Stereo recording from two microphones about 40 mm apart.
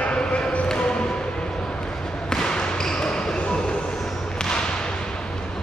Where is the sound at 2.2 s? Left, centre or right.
Centre.